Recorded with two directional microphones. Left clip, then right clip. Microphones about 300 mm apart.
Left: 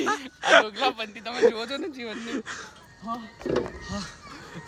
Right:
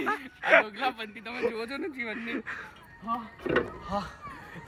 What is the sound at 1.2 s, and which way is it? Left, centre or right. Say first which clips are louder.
Speech: left 9 dB; left.